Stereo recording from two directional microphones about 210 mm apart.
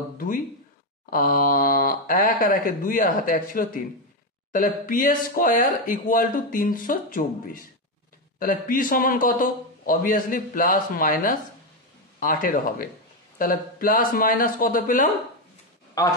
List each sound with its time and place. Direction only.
1.1 s speech: 45° left (ahead or behind)
15.9 s speech: 15° left (ahead or behind)